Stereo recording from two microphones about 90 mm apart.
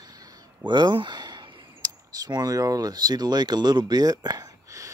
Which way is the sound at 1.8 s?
45° right (ahead or behind).